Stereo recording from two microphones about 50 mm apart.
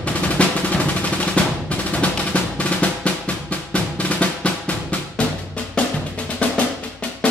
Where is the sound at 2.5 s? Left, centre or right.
Left.